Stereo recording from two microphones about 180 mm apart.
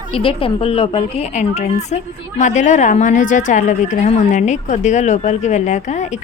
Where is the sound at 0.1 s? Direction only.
30° left (ahead or behind).